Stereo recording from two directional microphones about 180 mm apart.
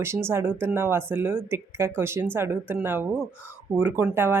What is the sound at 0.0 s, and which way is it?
Speech, 15° right (ahead or behind).